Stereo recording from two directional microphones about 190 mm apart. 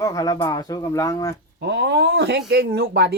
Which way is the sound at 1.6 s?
65° right (ahead or behind).